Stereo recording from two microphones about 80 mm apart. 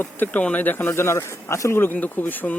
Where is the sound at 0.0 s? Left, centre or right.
Left.